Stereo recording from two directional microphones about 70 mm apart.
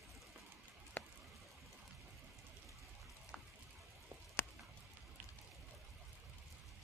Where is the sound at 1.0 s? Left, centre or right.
Left.